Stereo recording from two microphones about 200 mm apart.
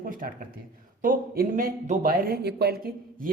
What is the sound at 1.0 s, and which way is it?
Speech, 45° right (ahead or behind).